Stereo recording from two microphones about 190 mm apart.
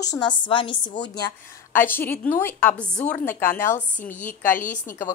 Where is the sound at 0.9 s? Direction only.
65° left (ahead or behind).